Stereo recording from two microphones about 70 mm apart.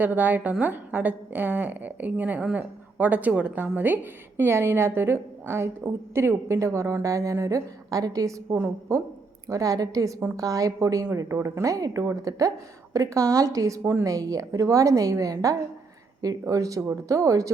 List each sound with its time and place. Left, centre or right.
0.0 s a woman's voice: right
8.5 s a woman's voice: right
9.5 s a woman's voice: right
11.6 s a woman's voice: right